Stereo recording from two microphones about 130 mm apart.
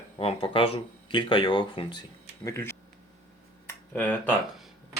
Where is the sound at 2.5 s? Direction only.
20° left (ahead or behind).